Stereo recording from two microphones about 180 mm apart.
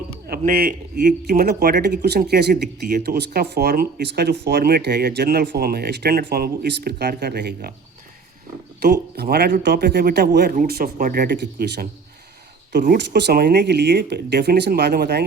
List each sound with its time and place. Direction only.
0.3 s speech: 55° right (ahead or behind)
8.8 s speech: 60° right (ahead or behind)